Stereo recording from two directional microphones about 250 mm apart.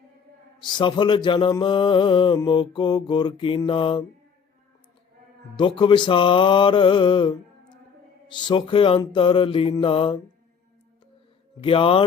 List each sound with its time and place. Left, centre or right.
0.6 s mantra: centre
5.5 s mantra: centre
11.6 s mantra: left